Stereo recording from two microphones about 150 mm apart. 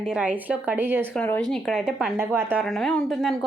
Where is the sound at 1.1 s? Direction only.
10° left (ahead or behind).